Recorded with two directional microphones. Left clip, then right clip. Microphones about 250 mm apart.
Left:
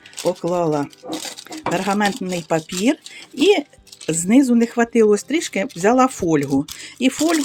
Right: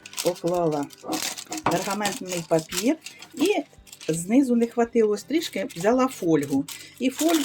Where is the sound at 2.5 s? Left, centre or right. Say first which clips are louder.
Left 3 dB; left.